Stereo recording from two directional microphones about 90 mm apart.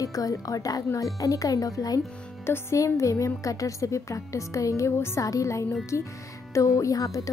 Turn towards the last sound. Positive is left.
turn(degrees=40)  # may be behind; listen again after turning